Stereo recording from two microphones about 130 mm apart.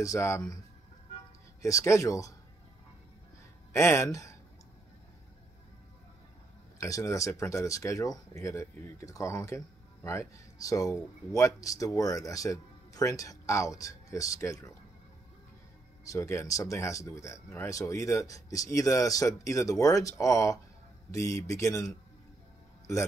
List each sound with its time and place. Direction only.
0.0 s speech: 20° left (ahead or behind)
1.6 s speech: 25° left (ahead or behind)
3.7 s speech: 20° left (ahead or behind)
6.8 s speech: 25° left (ahead or behind)
16.0 s speech: 25° left (ahead or behind)